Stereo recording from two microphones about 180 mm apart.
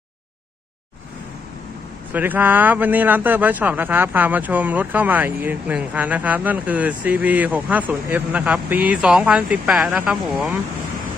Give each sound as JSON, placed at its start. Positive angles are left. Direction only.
{"t": 2.1, "sound": "speech", "side_deg": -10}